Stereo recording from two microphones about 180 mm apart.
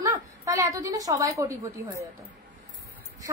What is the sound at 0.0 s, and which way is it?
A woman's voice, 20° right (ahead or behind).